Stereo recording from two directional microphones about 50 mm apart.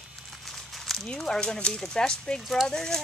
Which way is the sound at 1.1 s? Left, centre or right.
Centre.